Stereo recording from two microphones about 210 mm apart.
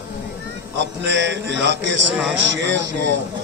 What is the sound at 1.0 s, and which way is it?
A man's voice, 55° right (ahead or behind).